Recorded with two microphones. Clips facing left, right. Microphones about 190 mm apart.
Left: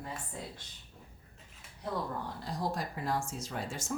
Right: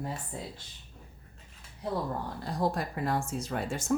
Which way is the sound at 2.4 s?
60° right (ahead or behind).